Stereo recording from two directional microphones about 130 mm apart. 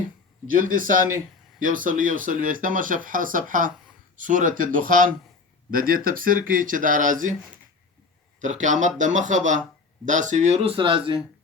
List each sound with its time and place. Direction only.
0.4 s speech: 90° right
8.4 s speech: 70° right (ahead or behind); by 11.2 s 40° right (ahead or behind)